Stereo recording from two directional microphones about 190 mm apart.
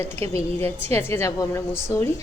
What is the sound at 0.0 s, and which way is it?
Speech, 30° right (ahead or behind).